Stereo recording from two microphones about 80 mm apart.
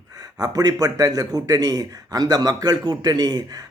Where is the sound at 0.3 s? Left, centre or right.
Right.